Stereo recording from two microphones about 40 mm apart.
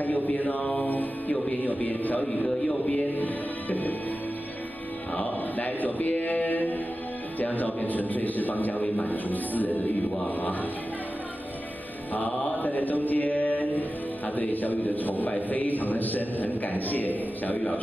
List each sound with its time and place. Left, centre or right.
0.0 s mantra: left
1.3 s a man's voice: left
5.1 s a man's voice: left
12.4 s a man's voice: left